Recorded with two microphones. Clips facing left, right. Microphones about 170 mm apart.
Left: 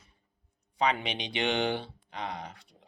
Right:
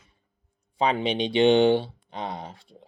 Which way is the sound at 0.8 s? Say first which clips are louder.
Right 6 dB; 30° right (ahead or behind).